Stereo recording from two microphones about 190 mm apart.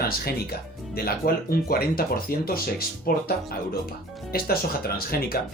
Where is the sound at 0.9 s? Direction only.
50° left (ahead or behind).